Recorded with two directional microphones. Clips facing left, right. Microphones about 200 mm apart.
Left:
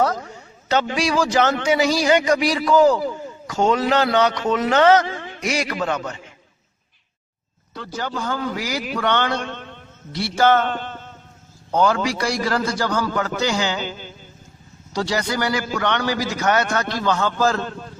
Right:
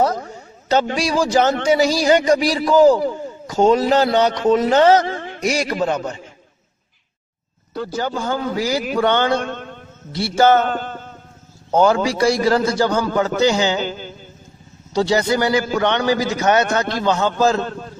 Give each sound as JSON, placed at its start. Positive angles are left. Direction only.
{"t": 0.7, "sound": "a man's voice", "side_deg": -35}
{"t": 7.7, "sound": "a man's voice", "side_deg": -30}
{"t": 9.4, "sound": "a man's voice", "side_deg": -45}
{"t": 10.1, "sound": "a man's voice", "side_deg": -25}
{"t": 10.6, "sound": "a sound", "side_deg": -45}
{"t": 11.7, "sound": "a man's voice", "side_deg": -25}
{"t": 13.7, "sound": "a sound", "side_deg": -45}
{"t": 14.9, "sound": "a man's voice", "side_deg": -25}